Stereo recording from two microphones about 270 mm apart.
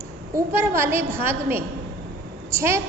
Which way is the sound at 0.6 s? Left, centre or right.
Centre.